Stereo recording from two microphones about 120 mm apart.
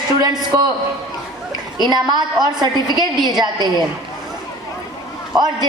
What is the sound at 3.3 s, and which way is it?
Speech, 35° right (ahead or behind).